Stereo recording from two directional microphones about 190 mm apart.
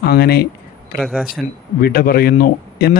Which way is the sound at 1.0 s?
5° right (ahead or behind).